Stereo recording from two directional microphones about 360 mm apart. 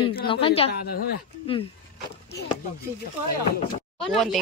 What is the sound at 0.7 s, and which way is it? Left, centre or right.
Speech, left.